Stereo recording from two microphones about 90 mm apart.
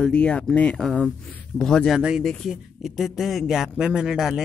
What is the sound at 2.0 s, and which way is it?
Speech, 10° right (ahead or behind).